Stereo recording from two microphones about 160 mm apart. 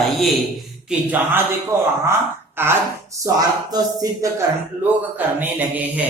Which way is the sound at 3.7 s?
25° right (ahead or behind).